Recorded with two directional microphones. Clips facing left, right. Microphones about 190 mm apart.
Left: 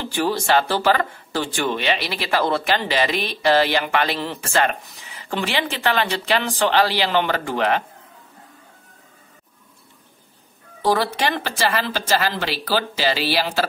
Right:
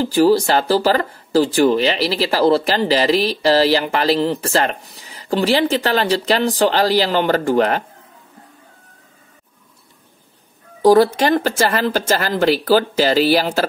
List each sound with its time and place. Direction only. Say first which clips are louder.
0.0 s speech: right 9 dB; 35° right (ahead or behind)
10.8 s speech: right 9 dB; 45° right (ahead or behind)